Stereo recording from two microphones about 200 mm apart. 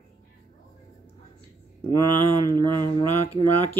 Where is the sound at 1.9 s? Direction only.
20° right (ahead or behind).